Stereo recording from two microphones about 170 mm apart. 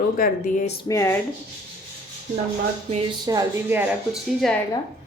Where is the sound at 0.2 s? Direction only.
50° left (ahead or behind).